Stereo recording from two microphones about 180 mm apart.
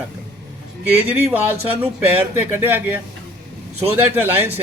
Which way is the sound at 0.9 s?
10° right (ahead or behind).